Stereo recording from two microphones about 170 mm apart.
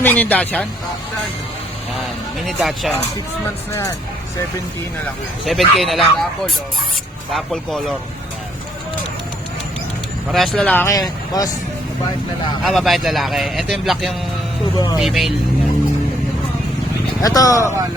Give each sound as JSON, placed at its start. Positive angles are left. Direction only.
{"t": 0.0, "sound": "speech", "side_deg": 10}
{"t": 2.4, "sound": "speech", "side_deg": 0}
{"t": 3.7, "sound": "speech", "side_deg": 15}
{"t": 5.5, "sound": "speech", "side_deg": 0}
{"t": 10.3, "sound": "speech", "side_deg": 0}
{"t": 10.8, "sound": "speech", "side_deg": 20}
{"t": 12.6, "sound": "speech", "side_deg": 0}
{"t": 17.2, "sound": "speech", "side_deg": 20}